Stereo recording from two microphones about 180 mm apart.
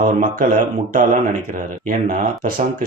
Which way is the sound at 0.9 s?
45° right (ahead or behind).